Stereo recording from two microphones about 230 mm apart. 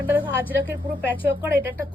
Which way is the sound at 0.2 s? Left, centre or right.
Centre.